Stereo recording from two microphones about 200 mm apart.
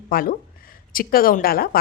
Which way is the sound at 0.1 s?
45° left (ahead or behind).